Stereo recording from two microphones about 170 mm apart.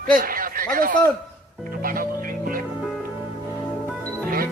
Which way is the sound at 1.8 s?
55° right (ahead or behind).